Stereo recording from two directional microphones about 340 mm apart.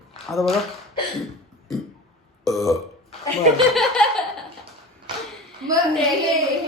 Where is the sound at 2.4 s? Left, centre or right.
Centre.